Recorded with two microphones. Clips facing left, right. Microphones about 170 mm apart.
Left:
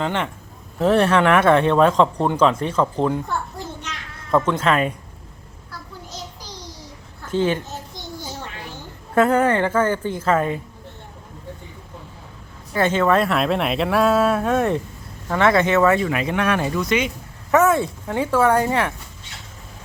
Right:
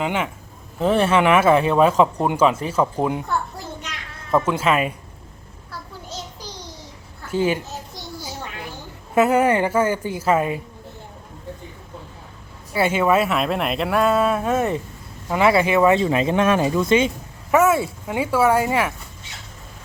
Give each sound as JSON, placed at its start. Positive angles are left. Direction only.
{"t": 0.0, "sound": "a woman's voice", "side_deg": -10}
{"t": 4.3, "sound": "a woman's voice", "side_deg": -10}
{"t": 7.3, "sound": "a child's voice", "side_deg": -10}
{"t": 9.1, "sound": "a woman's voice", "side_deg": -10}
{"t": 12.7, "sound": "a woman's voice", "side_deg": -10}
{"t": 16.0, "sound": "speech", "side_deg": -25}
{"t": 17.5, "sound": "a woman's voice", "side_deg": -10}